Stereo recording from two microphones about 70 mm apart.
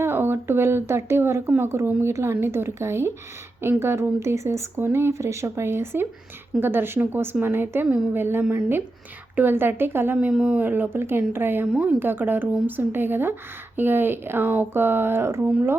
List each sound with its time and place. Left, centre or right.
0.0 s speech: right
10.3 s speech: centre
10.6 s speech: right